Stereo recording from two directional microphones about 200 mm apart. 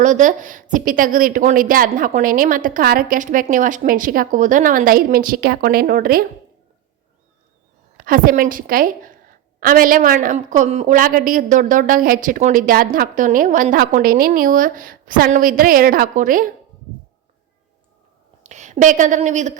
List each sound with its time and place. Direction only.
0.0 s a woman's voice: 40° right (ahead or behind)
7.9 s a woman's voice: 45° right (ahead or behind)
18.4 s a woman's voice: 35° right (ahead or behind)